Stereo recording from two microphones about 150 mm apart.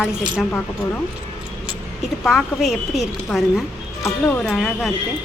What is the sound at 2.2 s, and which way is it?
A woman's voice, 5° left (ahead or behind).